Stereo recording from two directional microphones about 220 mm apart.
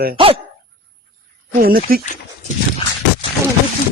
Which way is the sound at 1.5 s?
40° right (ahead or behind).